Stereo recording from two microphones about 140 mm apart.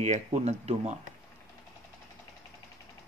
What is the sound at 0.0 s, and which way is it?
Speech, 55° right (ahead or behind).